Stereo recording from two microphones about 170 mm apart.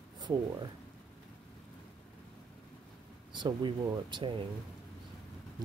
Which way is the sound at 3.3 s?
25° right (ahead or behind).